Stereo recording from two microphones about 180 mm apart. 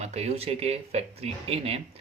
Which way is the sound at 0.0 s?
35° right (ahead or behind).